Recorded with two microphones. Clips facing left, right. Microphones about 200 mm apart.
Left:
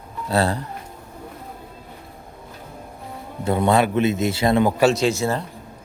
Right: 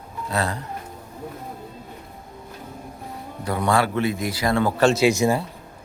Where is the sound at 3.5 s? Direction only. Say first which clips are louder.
Left 3 dB; 25° left (ahead or behind).